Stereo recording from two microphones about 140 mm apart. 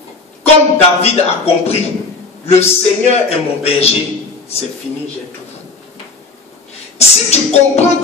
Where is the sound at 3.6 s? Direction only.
45° left (ahead or behind).